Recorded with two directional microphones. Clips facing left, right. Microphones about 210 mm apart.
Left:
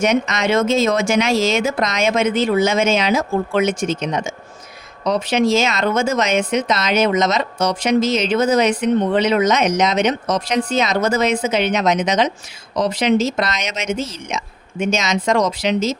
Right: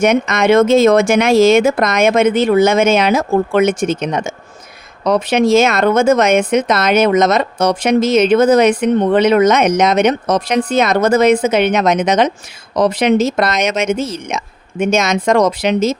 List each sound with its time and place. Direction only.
0.0 s speech: 55° right (ahead or behind)